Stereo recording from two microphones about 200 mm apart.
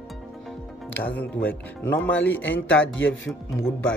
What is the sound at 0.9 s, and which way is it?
Speech, 10° left (ahead or behind).